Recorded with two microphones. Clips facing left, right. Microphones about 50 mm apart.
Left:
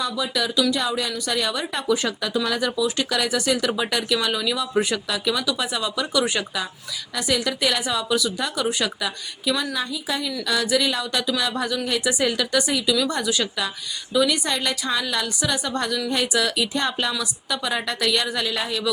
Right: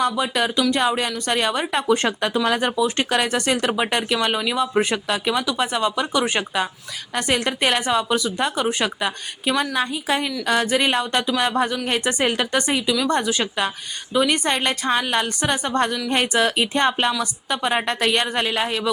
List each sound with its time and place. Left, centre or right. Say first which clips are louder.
0.0 s speech: right 4 dB; right
12.8 s speech: even; right
13.2 s speech: right 2 dB; right